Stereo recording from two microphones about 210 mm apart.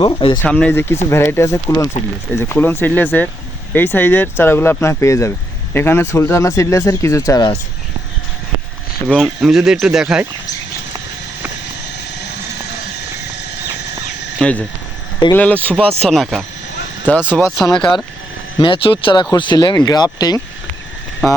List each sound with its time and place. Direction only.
0.0 s speech: 25° left (ahead or behind)
0.4 s speech: 5° left (ahead or behind)
9.0 s speech: centre (ahead or behind)
14.3 s speech: 5° left (ahead or behind)
18.6 s speech: 25° left (ahead or behind)